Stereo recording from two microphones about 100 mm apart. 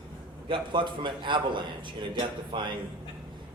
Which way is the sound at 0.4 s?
55° right (ahead or behind).